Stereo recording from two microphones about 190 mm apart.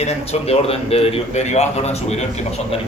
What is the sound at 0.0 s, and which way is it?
A man's voice, 35° left (ahead or behind).